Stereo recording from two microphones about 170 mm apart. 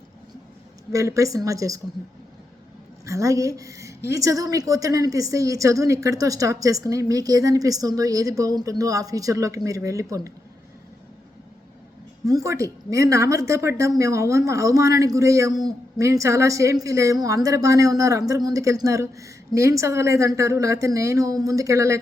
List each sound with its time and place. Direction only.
0.9 s a woman's voice: 20° right (ahead or behind)
3.1 s a woman's voice: 20° right (ahead or behind)
12.2 s a woman's voice: 20° right (ahead or behind)